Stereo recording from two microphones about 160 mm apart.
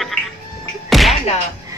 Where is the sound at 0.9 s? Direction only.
Centre (ahead or behind).